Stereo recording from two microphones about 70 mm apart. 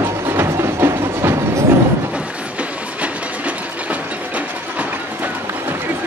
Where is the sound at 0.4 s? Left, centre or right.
Right.